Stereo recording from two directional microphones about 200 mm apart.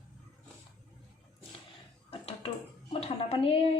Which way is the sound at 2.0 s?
30° left (ahead or behind).